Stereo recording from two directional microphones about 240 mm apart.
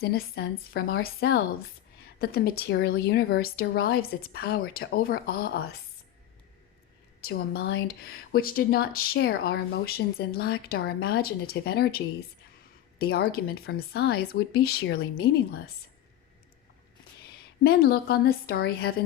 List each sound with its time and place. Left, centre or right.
0.0 s speech: left
7.2 s speech: left
17.6 s speech: left